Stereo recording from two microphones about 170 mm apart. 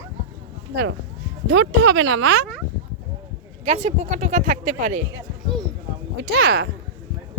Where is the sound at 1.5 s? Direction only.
90° right.